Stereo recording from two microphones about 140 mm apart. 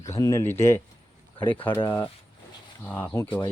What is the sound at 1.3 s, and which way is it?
Speech, 35° left (ahead or behind).